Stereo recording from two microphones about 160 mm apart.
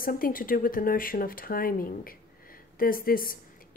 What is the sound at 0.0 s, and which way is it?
A woman's voice, 60° left (ahead or behind).